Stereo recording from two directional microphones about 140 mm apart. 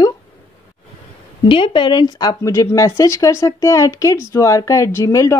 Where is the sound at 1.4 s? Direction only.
35° left (ahead or behind).